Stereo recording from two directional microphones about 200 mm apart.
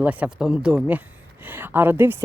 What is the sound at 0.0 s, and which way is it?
Speech, 10° right (ahead or behind).